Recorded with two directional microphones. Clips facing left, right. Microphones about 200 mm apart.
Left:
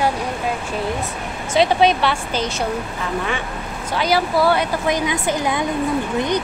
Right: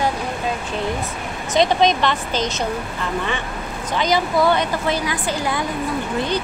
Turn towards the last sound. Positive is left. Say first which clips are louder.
# left 2 dB
turn(degrees=15)  # may be behind; listen again after turning